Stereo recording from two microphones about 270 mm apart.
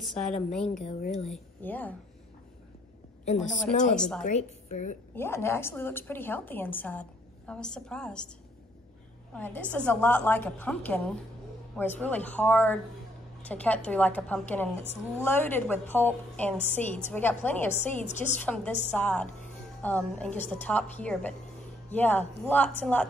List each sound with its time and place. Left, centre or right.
0.0 s a woman's voice: centre
0.8 s a woman's voice: left
1.3 s a woman's voice: centre
3.9 s a woman's voice: centre
4.2 s a woman's voice: left
5.1 s a woman's voice: centre
9.3 s a woman's voice: centre
18.0 s a woman's voice: left
18.4 s a woman's voice: centre